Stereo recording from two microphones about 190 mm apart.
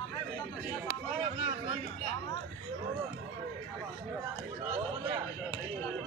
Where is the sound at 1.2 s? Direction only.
30° right (ahead or behind).